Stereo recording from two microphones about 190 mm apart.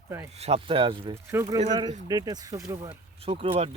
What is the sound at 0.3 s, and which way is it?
Speech, 35° right (ahead or behind).